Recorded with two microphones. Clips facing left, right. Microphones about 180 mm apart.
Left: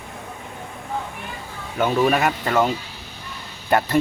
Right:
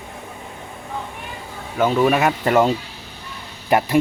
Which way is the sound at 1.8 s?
Centre (ahead or behind).